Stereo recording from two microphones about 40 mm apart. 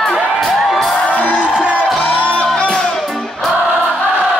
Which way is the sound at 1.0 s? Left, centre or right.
Left.